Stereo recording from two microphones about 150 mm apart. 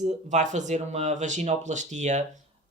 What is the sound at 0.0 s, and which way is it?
Speech, 50° right (ahead or behind).